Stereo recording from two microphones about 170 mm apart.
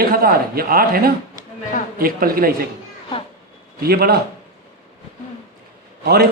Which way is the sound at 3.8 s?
65° right (ahead or behind).